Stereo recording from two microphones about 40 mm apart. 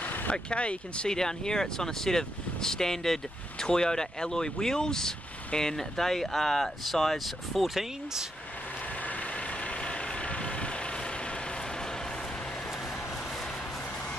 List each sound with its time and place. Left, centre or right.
0.0 s a sound: left
0.3 s speech: left
1.0 s speech: centre
8.8 s vehicle: left
13.1 s vehicle: centre